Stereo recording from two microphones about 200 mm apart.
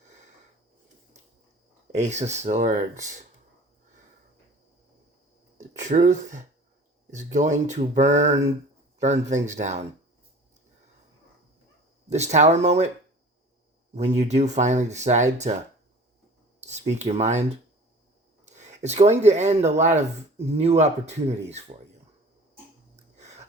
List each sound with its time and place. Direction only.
1.9 s speech: 35° right (ahead or behind)
5.5 s a sound: 40° right (ahead or behind)
7.1 s speech: 35° right (ahead or behind)
12.0 s speech: 35° right (ahead or behind)
14.2 s speech: 35° right (ahead or behind)
16.6 s speech: 35° right (ahead or behind)
18.4 s speech: 35° right (ahead or behind)
23.0 s a sound: 35° right (ahead or behind)